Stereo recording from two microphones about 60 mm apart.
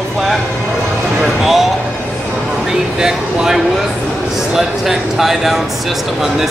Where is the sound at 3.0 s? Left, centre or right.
Centre.